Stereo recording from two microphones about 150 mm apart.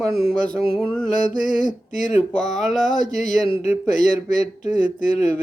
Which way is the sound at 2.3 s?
5° left (ahead or behind).